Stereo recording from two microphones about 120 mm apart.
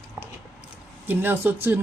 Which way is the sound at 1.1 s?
15° right (ahead or behind).